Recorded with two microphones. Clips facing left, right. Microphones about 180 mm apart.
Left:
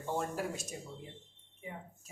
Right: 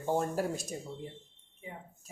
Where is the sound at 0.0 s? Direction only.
40° right (ahead or behind).